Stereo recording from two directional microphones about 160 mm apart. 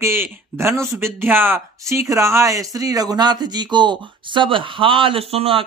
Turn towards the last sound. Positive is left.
turn(degrees=-35)  # may be behind; listen again after turning